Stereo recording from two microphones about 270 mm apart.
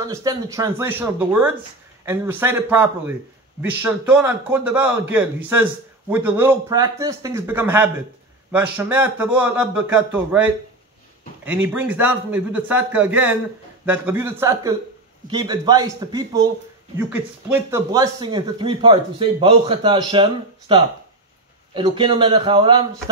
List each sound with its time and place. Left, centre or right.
0.0 s a man's voice: centre